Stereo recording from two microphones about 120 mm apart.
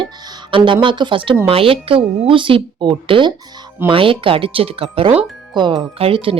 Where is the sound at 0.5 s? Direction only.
45° right (ahead or behind).